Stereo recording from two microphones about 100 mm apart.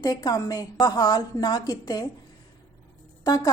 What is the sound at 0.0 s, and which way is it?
A woman's voice, 40° left (ahead or behind).